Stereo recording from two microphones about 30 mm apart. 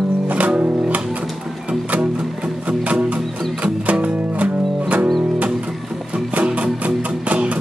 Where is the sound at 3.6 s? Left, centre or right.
Right.